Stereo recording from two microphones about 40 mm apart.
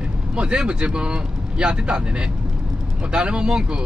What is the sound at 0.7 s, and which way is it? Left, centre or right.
Speech, right.